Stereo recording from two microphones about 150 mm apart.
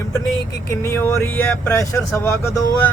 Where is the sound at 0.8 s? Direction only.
15° left (ahead or behind).